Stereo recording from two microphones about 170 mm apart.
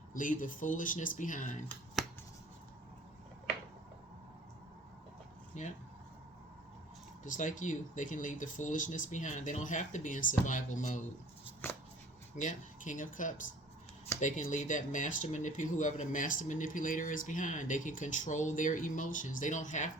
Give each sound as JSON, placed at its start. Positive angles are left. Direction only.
{"t": 0.1, "sound": "speech", "side_deg": 50}
{"t": 5.5, "sound": "speech", "side_deg": 45}
{"t": 7.3, "sound": "speech", "side_deg": 50}
{"t": 11.6, "sound": "a sound", "side_deg": 15}
{"t": 12.4, "sound": "speech", "side_deg": 50}